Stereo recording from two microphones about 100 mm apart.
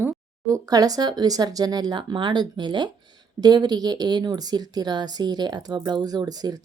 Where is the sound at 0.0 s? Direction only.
30° right (ahead or behind).